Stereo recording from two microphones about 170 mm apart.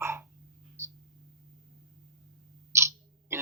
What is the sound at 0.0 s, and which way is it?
Hiccup, 15° right (ahead or behind).